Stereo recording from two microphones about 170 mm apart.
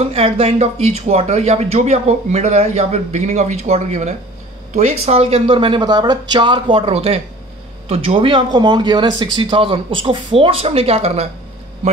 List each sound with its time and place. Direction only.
0.0 s speech: 35° right (ahead or behind)